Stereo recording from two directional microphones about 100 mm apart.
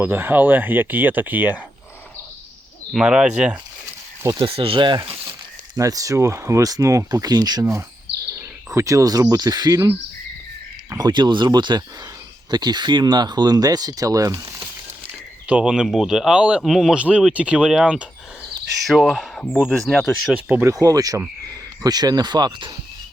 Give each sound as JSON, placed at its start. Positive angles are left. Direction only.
{"t": 0.0, "sound": "speech", "side_deg": -20}
{"t": 2.9, "sound": "speech", "side_deg": -10}
{"t": 4.4, "sound": "speech", "side_deg": -65}
{"t": 5.7, "sound": "speech", "side_deg": -35}
{"t": 7.6, "sound": "speech", "side_deg": -30}
{"t": 10.9, "sound": "speech", "side_deg": -45}
{"t": 15.4, "sound": "speech", "side_deg": -10}
{"t": 18.9, "sound": "speech", "side_deg": 5}
{"t": 20.7, "sound": "speech", "side_deg": -35}